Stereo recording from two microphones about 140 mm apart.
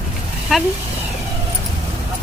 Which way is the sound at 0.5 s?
5° right (ahead or behind).